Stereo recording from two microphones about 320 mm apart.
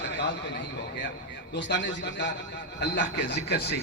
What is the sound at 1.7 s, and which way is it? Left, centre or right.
A man's voice, left.